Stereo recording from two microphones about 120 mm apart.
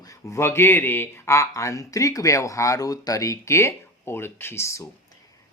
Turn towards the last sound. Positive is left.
turn(degrees=25)  # may be behind; listen again after turning